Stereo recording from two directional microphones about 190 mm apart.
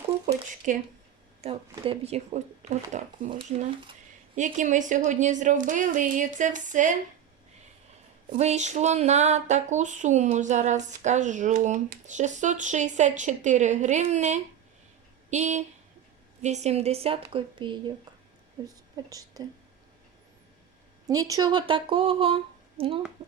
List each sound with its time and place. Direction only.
0.3 s speech: 40° right (ahead or behind)
1.7 s speech: 30° right (ahead or behind)
8.3 s speech: 35° right (ahead or behind)
19.0 s speech: 20° right (ahead or behind)
21.1 s speech: 20° right (ahead or behind)